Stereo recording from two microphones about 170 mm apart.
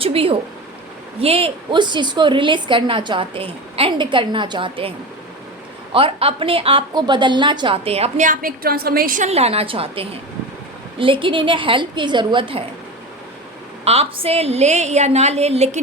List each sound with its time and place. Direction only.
0.0 s a woman's voice: 35° right (ahead or behind)
5.9 s a woman's voice: 35° right (ahead or behind)
8.3 s a woman's voice: 55° right (ahead or behind); by 12.6 s 30° right (ahead or behind)
13.8 s a woman's voice: 35° right (ahead or behind)